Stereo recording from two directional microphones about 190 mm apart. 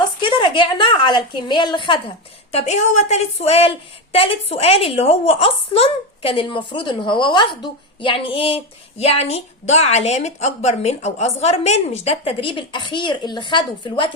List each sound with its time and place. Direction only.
0.2 s a woman's voice: 25° left (ahead or behind)